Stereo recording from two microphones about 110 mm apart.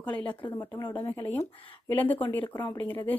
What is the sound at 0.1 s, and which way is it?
Speech, 15° left (ahead or behind).